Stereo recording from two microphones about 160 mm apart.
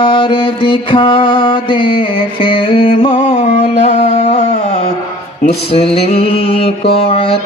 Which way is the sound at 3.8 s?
45° left (ahead or behind).